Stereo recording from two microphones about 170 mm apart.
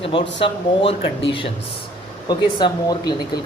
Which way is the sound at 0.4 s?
30° left (ahead or behind).